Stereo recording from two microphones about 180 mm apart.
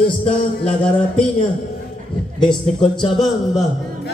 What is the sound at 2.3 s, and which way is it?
Music, 25° left (ahead or behind).